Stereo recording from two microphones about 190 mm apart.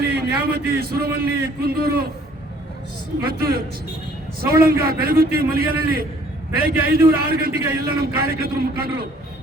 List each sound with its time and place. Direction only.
0.0 s a man's voice: 55° right (ahead or behind)
3.2 s a man's voice: 55° right (ahead or behind)